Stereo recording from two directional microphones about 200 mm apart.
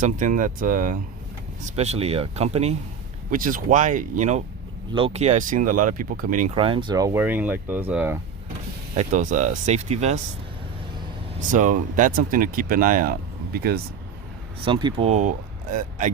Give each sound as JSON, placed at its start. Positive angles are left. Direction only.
{"t": 0.0, "sound": "speech", "side_deg": -40}
{"t": 3.2, "sound": "speech", "side_deg": -40}
{"t": 6.6, "sound": "speech", "side_deg": -25}
{"t": 9.0, "sound": "speech", "side_deg": -35}
{"t": 11.5, "sound": "speech", "side_deg": -40}
{"t": 14.6, "sound": "speech", "side_deg": -25}